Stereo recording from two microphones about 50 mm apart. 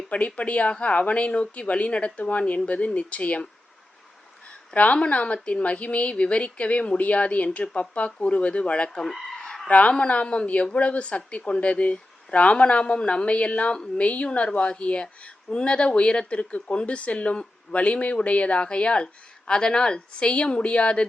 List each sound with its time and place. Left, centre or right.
0.1 s speech: left
4.7 s speech: left
9.0 s chicken: centre
9.6 s speech: left